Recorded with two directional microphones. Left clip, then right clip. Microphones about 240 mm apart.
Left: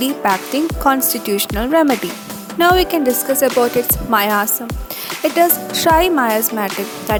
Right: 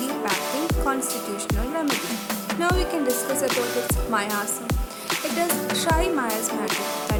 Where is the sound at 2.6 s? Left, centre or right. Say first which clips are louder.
Left 12 dB; left.